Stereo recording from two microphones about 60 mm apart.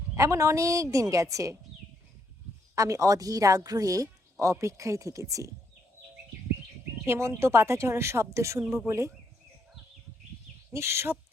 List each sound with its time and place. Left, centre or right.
0.2 s a woman's voice: right
2.7 s a woman's voice: right
7.0 s speech: right
10.7 s speech: right